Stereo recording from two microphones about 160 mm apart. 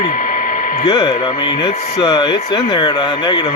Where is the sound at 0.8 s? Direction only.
25° left (ahead or behind).